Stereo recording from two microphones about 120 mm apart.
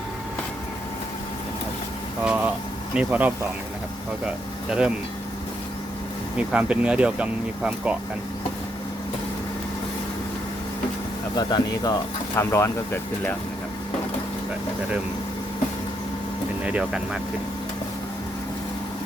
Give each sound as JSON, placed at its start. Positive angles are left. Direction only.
{"t": 2.2, "sound": "speech", "side_deg": -10}
{"t": 4.7, "sound": "speech", "side_deg": -10}
{"t": 6.3, "sound": "speech", "side_deg": -10}
{"t": 11.3, "sound": "speech", "side_deg": 35}
{"t": 16.6, "sound": "speech", "side_deg": -10}